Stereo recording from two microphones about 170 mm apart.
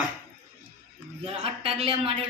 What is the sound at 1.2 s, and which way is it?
A man's voice, 35° right (ahead or behind).